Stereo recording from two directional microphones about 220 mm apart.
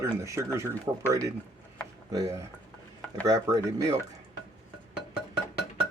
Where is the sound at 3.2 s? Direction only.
15° right (ahead or behind).